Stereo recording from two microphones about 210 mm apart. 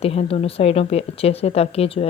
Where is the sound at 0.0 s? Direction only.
30° left (ahead or behind).